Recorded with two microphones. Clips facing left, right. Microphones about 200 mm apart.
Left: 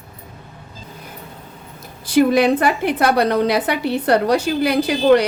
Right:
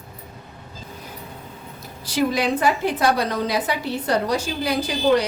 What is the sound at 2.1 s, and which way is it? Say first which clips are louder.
A woman's voice: left 7 dB; 60° left (ahead or behind).